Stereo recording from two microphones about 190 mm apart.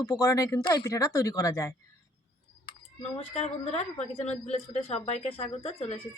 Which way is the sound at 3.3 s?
30° left (ahead or behind).